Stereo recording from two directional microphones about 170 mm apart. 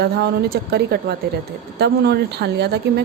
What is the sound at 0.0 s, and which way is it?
A woman's voice, 65° right (ahead or behind).